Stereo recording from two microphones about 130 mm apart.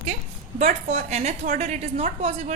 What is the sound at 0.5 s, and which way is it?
A woman's voice, 55° right (ahead or behind).